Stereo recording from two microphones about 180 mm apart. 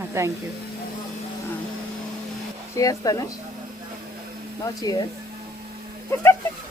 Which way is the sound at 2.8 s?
20° left (ahead or behind).